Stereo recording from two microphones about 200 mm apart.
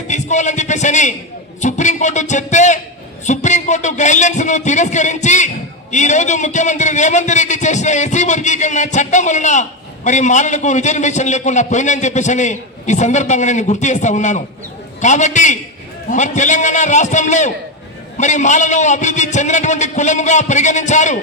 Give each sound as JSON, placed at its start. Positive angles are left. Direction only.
{"t": 0.1, "sound": "a man's voice", "side_deg": 35}